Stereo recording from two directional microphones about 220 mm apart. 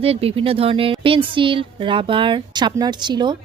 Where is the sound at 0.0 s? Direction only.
25° right (ahead or behind).